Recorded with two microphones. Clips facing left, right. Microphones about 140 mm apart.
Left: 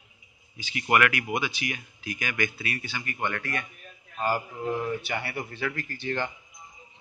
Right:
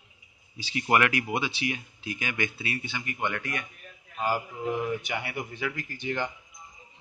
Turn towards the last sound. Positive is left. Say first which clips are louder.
# left 1 dB
turn(degrees=-15)  # may be behind; listen again after turning